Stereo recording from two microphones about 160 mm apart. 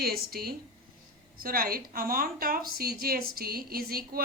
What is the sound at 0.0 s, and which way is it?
A woman's voice, 70° right (ahead or behind).